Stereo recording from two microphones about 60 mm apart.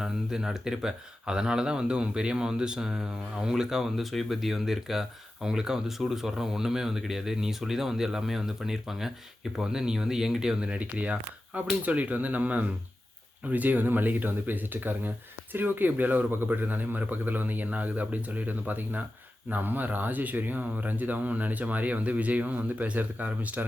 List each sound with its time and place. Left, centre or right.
0.0 s a man's voice: centre; by 23.6 s right